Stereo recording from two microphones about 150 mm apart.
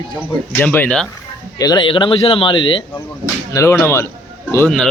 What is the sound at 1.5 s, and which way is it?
A man's voice, 25° left (ahead or behind).